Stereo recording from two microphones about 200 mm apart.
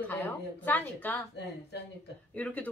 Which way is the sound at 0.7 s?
10° left (ahead or behind).